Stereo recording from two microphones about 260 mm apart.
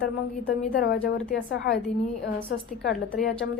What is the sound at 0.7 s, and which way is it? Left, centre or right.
A woman's voice, left.